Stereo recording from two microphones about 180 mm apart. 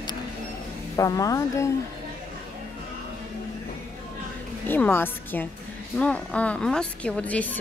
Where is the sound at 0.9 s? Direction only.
20° left (ahead or behind).